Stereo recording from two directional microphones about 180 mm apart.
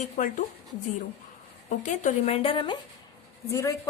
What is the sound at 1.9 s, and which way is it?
A woman's voice, 40° left (ahead or behind).